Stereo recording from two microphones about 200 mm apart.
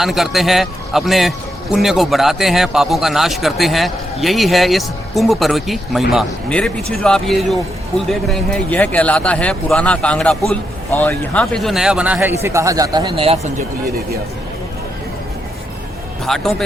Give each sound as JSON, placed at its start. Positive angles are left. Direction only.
{"t": 0.0, "sound": "a man's voice", "side_deg": 0}
{"t": 16.2, "sound": "a man's voice", "side_deg": 0}